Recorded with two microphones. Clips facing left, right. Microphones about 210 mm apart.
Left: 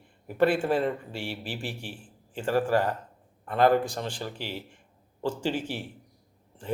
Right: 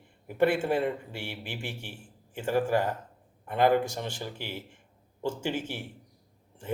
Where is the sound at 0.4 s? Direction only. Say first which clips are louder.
Left 1 dB; 20° right (ahead or behind).